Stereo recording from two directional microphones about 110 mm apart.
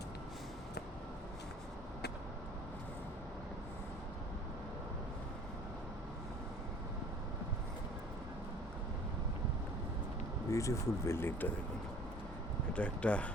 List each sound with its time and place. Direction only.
10.5 s speech: 30° left (ahead or behind)
12.7 s speech: 10° left (ahead or behind)